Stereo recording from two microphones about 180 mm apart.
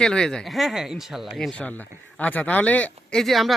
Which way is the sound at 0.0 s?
5° left (ahead or behind).